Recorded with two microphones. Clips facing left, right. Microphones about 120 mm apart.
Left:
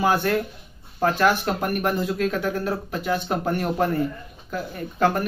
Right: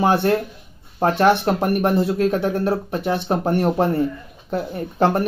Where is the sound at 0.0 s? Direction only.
25° right (ahead or behind).